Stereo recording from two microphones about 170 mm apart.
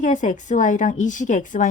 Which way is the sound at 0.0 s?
45° left (ahead or behind).